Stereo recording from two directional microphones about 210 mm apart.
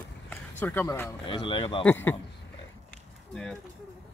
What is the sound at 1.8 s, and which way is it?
Speech, 10° left (ahead or behind).